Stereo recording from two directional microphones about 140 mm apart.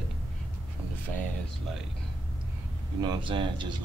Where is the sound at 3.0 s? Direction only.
35° right (ahead or behind).